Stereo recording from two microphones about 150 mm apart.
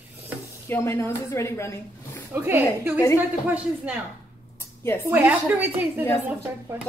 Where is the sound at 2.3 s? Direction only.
15° right (ahead or behind).